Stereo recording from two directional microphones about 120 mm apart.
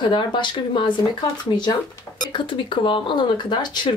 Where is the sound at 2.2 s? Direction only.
45° left (ahead or behind).